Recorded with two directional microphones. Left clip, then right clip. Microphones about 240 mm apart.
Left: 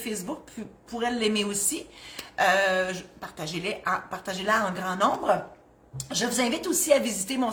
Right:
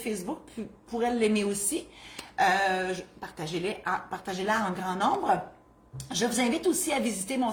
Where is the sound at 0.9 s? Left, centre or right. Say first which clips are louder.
Even; centre.